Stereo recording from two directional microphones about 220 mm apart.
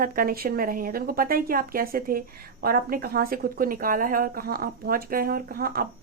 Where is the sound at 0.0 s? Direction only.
40° right (ahead or behind).